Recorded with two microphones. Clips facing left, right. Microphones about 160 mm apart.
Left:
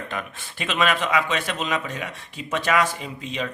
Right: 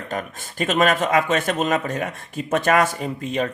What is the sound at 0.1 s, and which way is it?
A man's voice, 45° right (ahead or behind).